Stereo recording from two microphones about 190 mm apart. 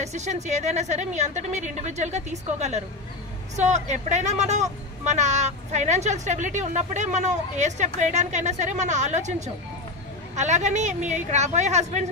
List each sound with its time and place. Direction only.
0.0 s speech: 35° right (ahead or behind)
10.3 s speech: 40° right (ahead or behind)